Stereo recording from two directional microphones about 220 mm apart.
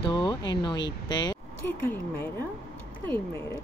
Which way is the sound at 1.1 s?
20° left (ahead or behind).